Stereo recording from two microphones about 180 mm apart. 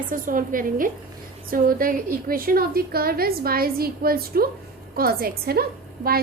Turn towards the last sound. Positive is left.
turn(degrees=-55)  # may be behind; listen again after turning